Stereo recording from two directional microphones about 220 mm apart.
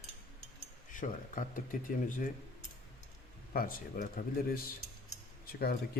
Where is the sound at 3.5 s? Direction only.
40° left (ahead or behind).